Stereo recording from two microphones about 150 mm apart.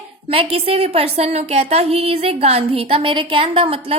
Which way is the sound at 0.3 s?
40° right (ahead or behind).